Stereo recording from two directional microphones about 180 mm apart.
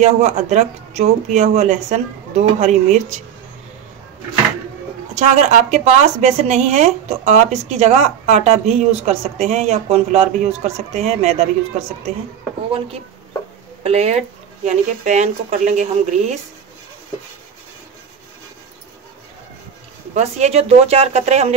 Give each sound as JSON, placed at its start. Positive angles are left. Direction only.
{"t": 0.0, "sound": "speech", "side_deg": -40}
{"t": 5.1, "sound": "speech", "side_deg": -40}
{"t": 13.8, "sound": "speech", "side_deg": -35}
{"t": 20.2, "sound": "speech", "side_deg": -35}